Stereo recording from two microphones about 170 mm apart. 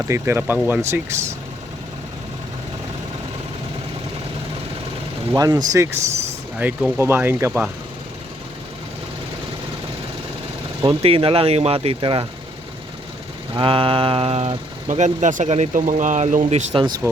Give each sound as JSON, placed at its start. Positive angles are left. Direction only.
{"t": 0.1, "sound": "speech", "side_deg": -15}
{"t": 5.4, "sound": "speech", "side_deg": -20}
{"t": 6.6, "sound": "speech", "side_deg": -10}
{"t": 10.8, "sound": "speech", "side_deg": -35}
{"t": 13.5, "sound": "speech", "side_deg": -30}